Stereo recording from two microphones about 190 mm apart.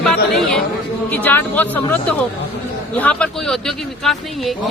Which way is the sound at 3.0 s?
5° left (ahead or behind).